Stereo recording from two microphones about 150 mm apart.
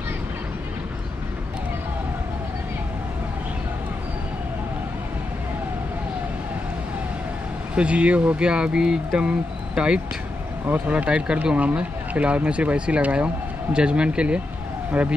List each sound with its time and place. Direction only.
7.7 s speech: 10° right (ahead or behind)